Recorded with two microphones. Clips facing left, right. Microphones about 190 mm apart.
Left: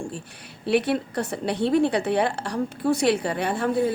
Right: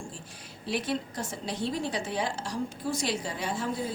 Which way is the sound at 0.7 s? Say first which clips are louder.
Left 9 dB; 65° left (ahead or behind).